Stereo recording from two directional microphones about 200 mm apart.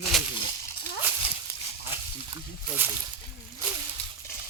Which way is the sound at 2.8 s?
10° right (ahead or behind).